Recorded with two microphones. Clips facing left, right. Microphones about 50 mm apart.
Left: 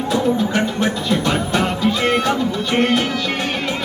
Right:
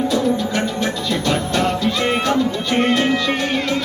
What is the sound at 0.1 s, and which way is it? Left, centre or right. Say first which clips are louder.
Music: left 1 dB; left.